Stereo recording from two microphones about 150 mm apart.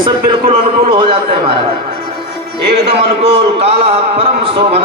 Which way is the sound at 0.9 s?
35° right (ahead or behind).